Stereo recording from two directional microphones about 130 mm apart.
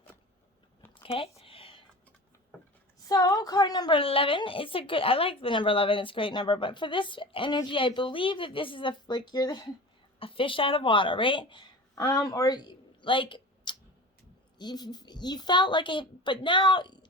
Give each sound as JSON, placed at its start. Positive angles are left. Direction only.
{"t": 1.0, "sound": "a sound", "side_deg": 45}
{"t": 3.1, "sound": "a woman's voice", "side_deg": 25}
{"t": 10.2, "sound": "a woman's voice", "side_deg": 45}
{"t": 11.9, "sound": "a woman's voice", "side_deg": 25}